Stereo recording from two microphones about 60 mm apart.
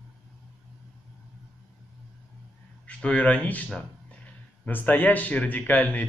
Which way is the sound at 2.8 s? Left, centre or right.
Left.